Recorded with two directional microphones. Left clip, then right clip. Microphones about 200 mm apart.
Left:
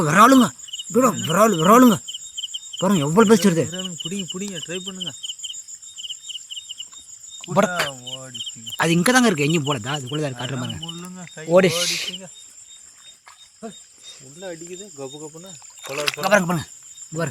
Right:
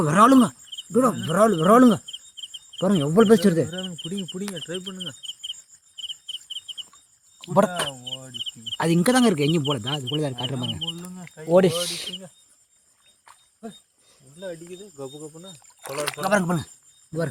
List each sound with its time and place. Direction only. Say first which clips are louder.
0.0 s speech: left 3 dB; 5° right (ahead or behind); by 5.1 s 10° left (ahead or behind)
7.3 s speech: left 1 dB; 15° right (ahead or behind)
8.1 s cricket: left 1 dB; 15° left (ahead or behind)
8.8 s speech: left 3 dB; 10° right (ahead or behind)
11.0 s speech: left 3 dB; 10° left (ahead or behind)
11.5 s speech: left 3 dB; 10° right (ahead or behind)
14.3 s speech: left 1 dB; 20° left (ahead or behind)
14.9 s speech: left 1 dB; centre (ahead or behind)
15.8 s speech: left 4 dB; 45° right (ahead or behind)
16.2 s speech: left 4 dB; 5° right (ahead or behind)